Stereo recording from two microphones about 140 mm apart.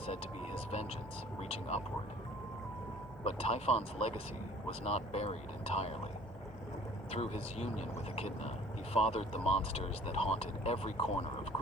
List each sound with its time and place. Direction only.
0.7 s speech: 50° left (ahead or behind)
3.2 s speech: 45° left (ahead or behind)
7.1 s speech: 45° left (ahead or behind)